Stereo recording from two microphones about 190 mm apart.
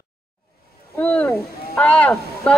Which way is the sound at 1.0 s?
10° left (ahead or behind).